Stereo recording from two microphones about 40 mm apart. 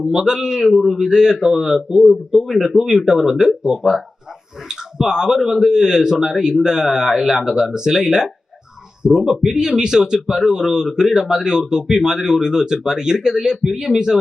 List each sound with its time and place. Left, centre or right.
0.0 s a man's voice: centre